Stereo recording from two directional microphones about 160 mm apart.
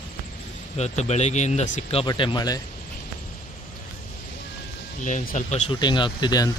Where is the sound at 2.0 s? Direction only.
30° left (ahead or behind).